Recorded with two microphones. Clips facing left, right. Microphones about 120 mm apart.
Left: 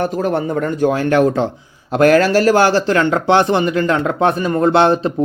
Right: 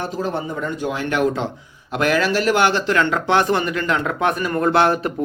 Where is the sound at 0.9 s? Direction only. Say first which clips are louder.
Left 6 dB; 40° left (ahead or behind).